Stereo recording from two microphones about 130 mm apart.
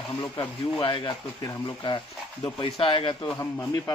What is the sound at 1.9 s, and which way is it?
A man's voice, 35° left (ahead or behind).